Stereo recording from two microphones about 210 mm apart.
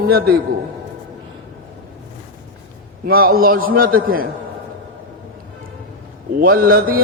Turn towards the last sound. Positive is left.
turn(degrees=-45)  # may be behind; listen again after turning